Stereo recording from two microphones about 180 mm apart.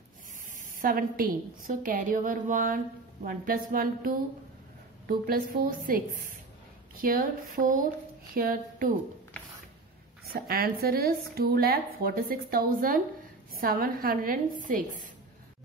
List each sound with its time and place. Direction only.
0.6 s a woman's voice: 50° right (ahead or behind)
10.2 s a woman's voice: 55° right (ahead or behind)